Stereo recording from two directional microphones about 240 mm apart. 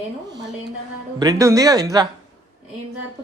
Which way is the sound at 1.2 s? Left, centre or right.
Centre.